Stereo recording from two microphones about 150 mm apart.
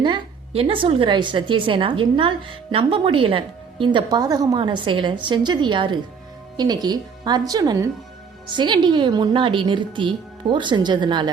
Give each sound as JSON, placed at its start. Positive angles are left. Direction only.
{"t": 0.0, "sound": "a woman's voice", "side_deg": -35}